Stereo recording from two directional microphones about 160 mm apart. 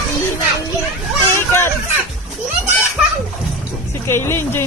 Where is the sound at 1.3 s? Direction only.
15° left (ahead or behind).